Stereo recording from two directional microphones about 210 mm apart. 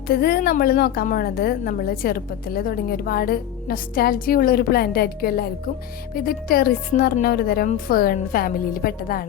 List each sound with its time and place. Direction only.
0.1 s a woman's voice: 50° left (ahead or behind)